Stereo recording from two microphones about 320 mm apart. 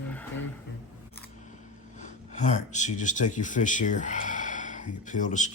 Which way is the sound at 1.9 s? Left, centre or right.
Left.